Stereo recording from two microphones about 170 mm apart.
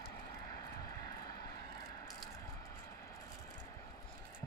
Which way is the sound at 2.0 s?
15° left (ahead or behind).